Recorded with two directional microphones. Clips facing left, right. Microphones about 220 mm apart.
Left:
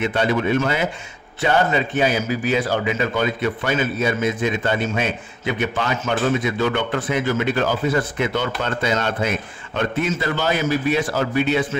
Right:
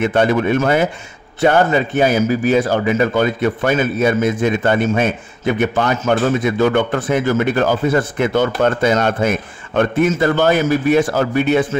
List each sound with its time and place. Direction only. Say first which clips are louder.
0.0 s a man's voice: right 5 dB; 50° right (ahead or behind)